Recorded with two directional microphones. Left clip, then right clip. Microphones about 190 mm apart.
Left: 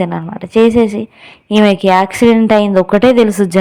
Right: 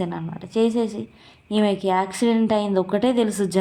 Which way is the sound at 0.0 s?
35° left (ahead or behind).